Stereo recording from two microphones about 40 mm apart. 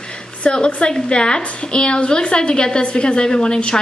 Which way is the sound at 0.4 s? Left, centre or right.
Left.